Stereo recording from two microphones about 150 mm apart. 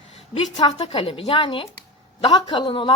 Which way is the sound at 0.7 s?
40° left (ahead or behind).